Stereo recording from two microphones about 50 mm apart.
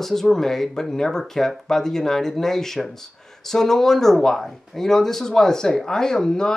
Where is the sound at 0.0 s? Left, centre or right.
Centre.